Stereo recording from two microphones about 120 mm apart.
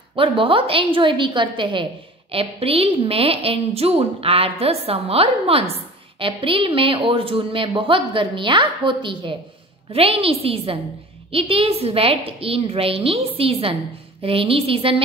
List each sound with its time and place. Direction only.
0.1 s a woman's voice: 45° right (ahead or behind)